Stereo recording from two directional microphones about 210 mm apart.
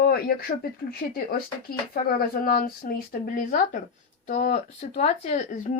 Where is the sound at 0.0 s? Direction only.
45° left (ahead or behind).